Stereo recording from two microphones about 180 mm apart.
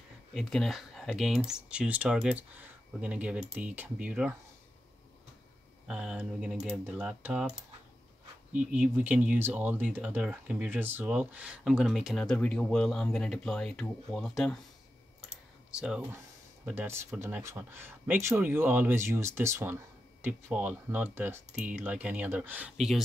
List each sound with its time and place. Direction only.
0.3 s speech: centre (ahead or behind)
5.9 s speech: 5° right (ahead or behind)
8.7 s speech: 5° right (ahead or behind)
15.7 s speech: 5° right (ahead or behind)